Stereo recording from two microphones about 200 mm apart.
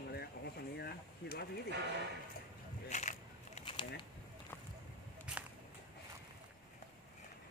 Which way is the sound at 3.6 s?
25° left (ahead or behind).